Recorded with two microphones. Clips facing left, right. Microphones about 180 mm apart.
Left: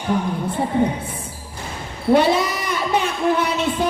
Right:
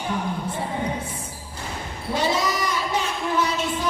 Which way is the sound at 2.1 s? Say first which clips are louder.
Left 5 dB; 60° left (ahead or behind).